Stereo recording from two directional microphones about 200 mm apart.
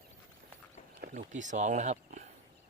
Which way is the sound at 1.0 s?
40° right (ahead or behind).